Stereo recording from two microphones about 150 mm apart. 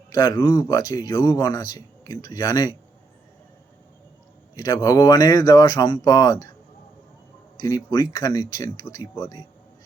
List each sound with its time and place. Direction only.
0.1 s speech: 25° left (ahead or behind)
4.5 s speech: 25° left (ahead or behind)
7.9 s speech: 30° left (ahead or behind)